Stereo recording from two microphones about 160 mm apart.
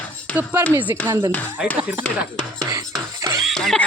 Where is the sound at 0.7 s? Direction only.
10° right (ahead or behind).